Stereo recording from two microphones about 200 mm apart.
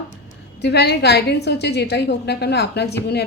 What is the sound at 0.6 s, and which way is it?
Speech, 55° left (ahead or behind).